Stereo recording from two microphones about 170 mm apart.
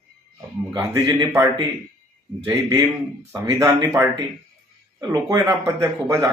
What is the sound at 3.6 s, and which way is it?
Speech, 15° right (ahead or behind).